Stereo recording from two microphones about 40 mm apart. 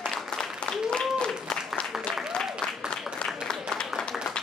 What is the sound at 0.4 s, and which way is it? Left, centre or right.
Applause, left.